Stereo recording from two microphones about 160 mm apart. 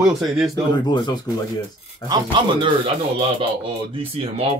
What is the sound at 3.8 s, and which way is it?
Speech, 35° right (ahead or behind).